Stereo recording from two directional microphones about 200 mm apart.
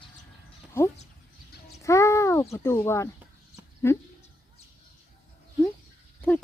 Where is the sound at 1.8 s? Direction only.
15° left (ahead or behind).